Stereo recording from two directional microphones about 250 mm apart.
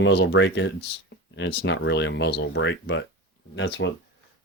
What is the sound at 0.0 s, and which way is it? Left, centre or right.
Speech, left.